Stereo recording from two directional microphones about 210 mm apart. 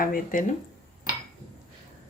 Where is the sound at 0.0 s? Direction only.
40° left (ahead or behind).